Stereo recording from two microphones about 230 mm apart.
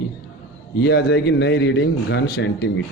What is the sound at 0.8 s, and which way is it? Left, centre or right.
A man's voice, left.